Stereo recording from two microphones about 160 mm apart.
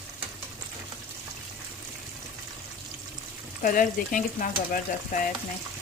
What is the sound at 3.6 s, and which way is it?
Speech, 55° left (ahead or behind).